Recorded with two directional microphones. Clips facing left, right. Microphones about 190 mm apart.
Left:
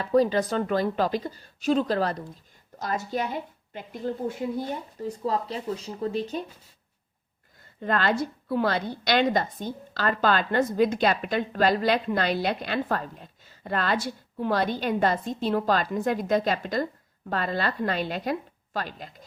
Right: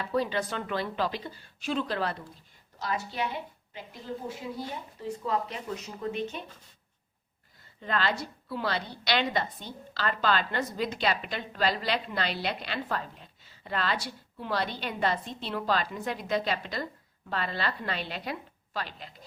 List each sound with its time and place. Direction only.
0.0 s a woman's voice: 40° left (ahead or behind)
7.8 s a woman's voice: 50° left (ahead or behind)